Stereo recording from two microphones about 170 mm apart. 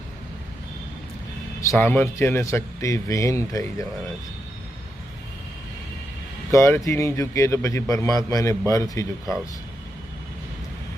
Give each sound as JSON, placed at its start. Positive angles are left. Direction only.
{"t": 1.6, "sound": "speech", "side_deg": 15}
{"t": 6.5, "sound": "speech", "side_deg": 15}